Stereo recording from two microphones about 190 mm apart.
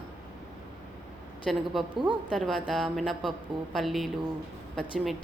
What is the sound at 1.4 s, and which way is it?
Speech, centre (ahead or behind).